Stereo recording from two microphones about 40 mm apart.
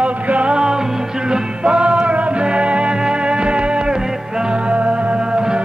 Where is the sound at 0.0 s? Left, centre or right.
Right.